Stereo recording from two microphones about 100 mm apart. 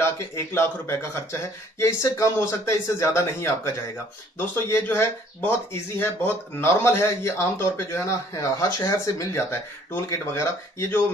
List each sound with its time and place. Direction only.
0.6 s speech: 25° left (ahead or behind)